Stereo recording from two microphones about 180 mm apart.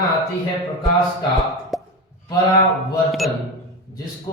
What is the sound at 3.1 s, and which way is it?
Speech, centre (ahead or behind).